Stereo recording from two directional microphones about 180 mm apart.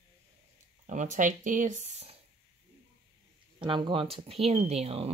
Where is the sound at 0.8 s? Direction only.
45° right (ahead or behind).